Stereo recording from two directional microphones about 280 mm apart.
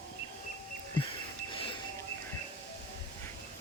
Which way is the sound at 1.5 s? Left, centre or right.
Centre.